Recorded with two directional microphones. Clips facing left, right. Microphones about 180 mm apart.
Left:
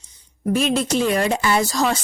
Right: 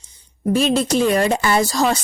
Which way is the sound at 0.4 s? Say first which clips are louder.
Right 2 dB; 30° right (ahead or behind).